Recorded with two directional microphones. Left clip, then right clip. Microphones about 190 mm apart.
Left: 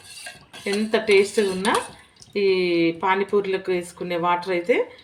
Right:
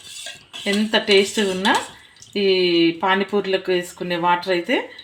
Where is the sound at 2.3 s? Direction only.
35° right (ahead or behind).